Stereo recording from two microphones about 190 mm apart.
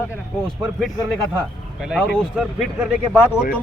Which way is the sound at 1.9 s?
Centre (ahead or behind).